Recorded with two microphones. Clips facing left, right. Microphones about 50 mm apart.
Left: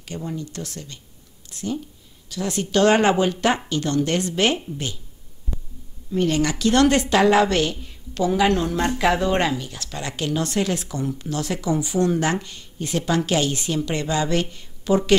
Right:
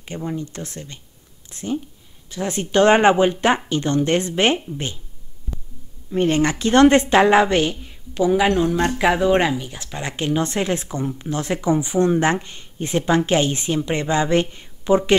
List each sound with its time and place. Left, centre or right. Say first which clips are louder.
0.0 s speech: right 3 dB; right
6.1 s speech: right 3 dB; right